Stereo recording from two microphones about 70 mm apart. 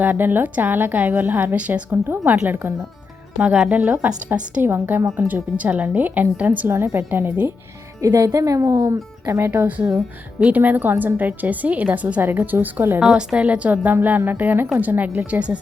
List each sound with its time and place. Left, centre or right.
0.0 s a woman's voice: right
3.7 s a woman's voice: right
6.7 s a woman's voice: right
8.0 s speech: right
9.5 s a woman's voice: right
13.0 s a woman's voice: centre